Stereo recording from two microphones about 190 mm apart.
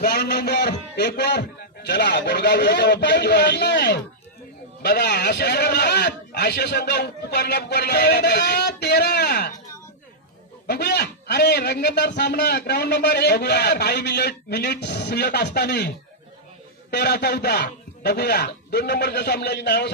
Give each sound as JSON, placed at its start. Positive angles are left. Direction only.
{"t": 0.0, "sound": "a man's voice", "side_deg": 55}
{"t": 10.7, "sound": "a man's voice", "side_deg": 60}
{"t": 16.9, "sound": "a man's voice", "side_deg": 60}